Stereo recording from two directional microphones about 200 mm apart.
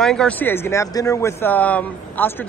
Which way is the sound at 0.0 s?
5° left (ahead or behind).